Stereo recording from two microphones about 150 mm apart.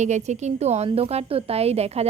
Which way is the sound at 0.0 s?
50° right (ahead or behind).